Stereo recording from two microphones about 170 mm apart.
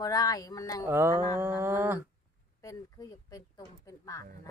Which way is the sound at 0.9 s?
15° right (ahead or behind).